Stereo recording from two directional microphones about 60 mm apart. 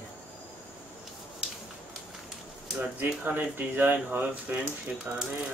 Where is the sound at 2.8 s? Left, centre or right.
Right.